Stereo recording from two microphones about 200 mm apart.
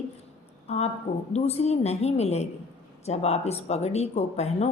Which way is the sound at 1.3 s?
30° left (ahead or behind).